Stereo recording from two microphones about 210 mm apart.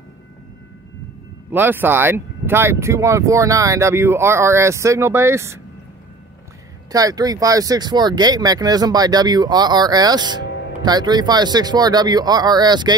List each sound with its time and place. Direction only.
1.5 s speech: 10° right (ahead or behind)
6.9 s speech: 15° right (ahead or behind)